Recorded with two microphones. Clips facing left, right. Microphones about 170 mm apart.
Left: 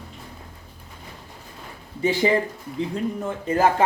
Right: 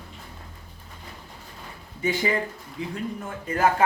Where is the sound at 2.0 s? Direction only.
30° left (ahead or behind).